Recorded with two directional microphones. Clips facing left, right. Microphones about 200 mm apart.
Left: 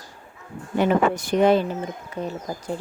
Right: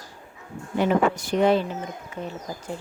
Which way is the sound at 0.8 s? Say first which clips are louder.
Left 2 dB; 55° left (ahead or behind).